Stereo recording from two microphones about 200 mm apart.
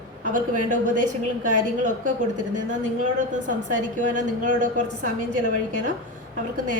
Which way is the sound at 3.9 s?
40° right (ahead or behind).